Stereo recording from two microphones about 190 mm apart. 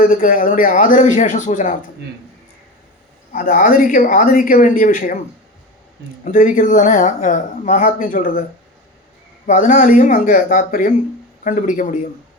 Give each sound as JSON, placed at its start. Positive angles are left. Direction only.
{"t": 0.1, "sound": "speech", "side_deg": 45}
{"t": 3.3, "sound": "speech", "side_deg": 45}
{"t": 6.2, "sound": "speech", "side_deg": 45}
{"t": 9.5, "sound": "speech", "side_deg": 40}